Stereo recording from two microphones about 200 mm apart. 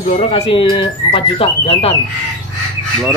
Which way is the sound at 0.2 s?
30° left (ahead or behind).